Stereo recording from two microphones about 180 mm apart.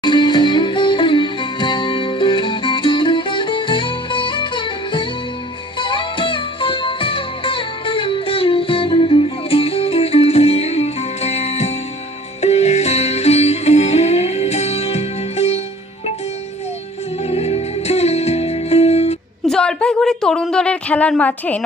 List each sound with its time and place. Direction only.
0.0 s music: 25° left (ahead or behind)
17.2 s music: 35° left (ahead or behind)
19.5 s a sound: 5° left (ahead or behind)